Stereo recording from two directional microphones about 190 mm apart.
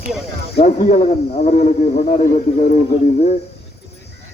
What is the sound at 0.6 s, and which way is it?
A man's voice, 35° left (ahead or behind).